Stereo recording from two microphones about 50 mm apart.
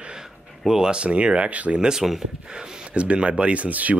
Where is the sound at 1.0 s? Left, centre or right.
Right.